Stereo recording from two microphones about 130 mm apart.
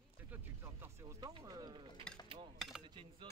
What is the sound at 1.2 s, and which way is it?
Speech, 35° right (ahead or behind).